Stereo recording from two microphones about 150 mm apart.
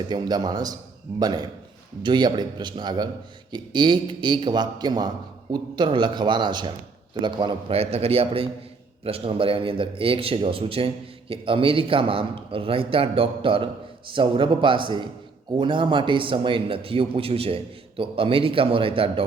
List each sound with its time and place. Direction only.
0.1 s a man's voice: 25° right (ahead or behind)